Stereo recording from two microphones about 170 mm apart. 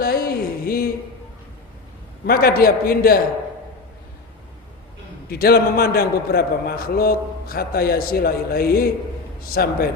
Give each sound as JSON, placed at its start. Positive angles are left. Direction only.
{"t": 0.0, "sound": "a sound", "side_deg": 60}
{"t": 2.2, "sound": "a man's voice", "side_deg": 65}
{"t": 5.3, "sound": "a man's voice", "side_deg": 65}